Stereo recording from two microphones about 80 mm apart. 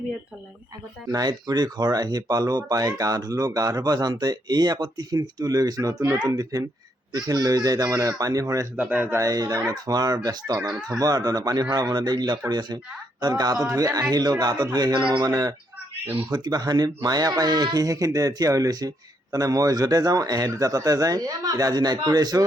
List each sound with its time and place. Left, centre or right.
1.1 s speech: right
8.7 s speech: centre
9.1 s a man's voice: right